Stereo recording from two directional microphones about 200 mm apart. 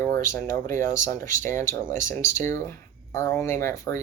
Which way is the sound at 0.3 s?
10° left (ahead or behind).